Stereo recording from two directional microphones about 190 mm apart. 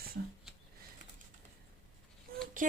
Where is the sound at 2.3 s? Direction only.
50° right (ahead or behind).